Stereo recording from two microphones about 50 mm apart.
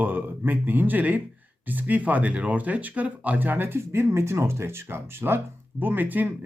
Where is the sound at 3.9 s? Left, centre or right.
Right.